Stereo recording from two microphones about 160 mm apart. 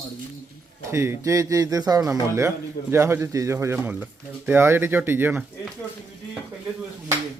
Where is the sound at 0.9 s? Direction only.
15° right (ahead or behind).